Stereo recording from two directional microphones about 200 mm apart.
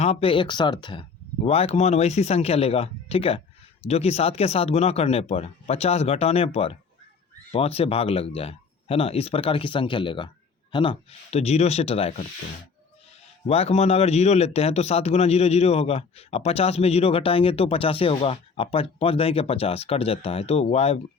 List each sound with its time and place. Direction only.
0.0 s a man's voice: 30° left (ahead or behind)
13.5 s a man's voice: 30° left (ahead or behind)